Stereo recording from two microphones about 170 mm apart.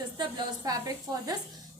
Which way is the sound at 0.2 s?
25° right (ahead or behind).